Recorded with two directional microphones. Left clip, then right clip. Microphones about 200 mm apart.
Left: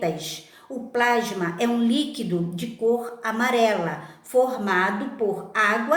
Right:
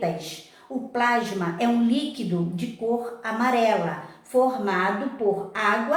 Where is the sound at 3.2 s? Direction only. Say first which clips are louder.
Left 1 dB; 50° left (ahead or behind).